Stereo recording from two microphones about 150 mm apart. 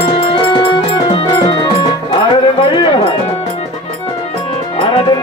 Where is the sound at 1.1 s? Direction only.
35° left (ahead or behind).